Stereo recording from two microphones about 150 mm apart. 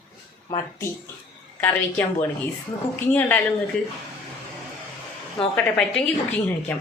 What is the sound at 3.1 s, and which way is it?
Speech, 10° left (ahead or behind).